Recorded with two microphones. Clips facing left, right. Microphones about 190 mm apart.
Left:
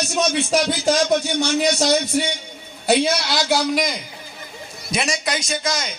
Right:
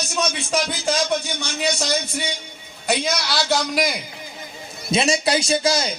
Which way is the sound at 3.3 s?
10° left (ahead or behind).